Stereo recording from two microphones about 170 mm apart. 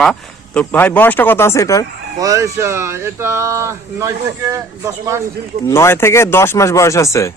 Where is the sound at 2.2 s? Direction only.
20° right (ahead or behind).